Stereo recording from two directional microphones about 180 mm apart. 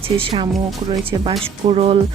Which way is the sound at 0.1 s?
25° right (ahead or behind).